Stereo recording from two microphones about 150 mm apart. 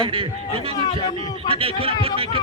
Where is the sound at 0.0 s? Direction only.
35° right (ahead or behind).